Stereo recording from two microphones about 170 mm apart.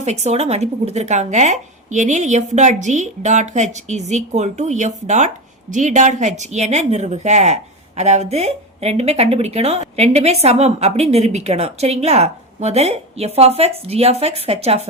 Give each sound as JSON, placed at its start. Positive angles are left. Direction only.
{"t": 0.0, "sound": "a woman's voice", "side_deg": -40}